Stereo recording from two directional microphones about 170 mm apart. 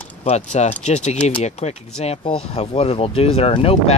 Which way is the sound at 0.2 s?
40° left (ahead or behind).